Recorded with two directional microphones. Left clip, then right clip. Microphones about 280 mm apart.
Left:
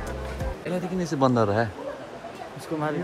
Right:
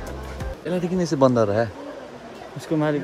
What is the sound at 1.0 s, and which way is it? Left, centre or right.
Speech, centre.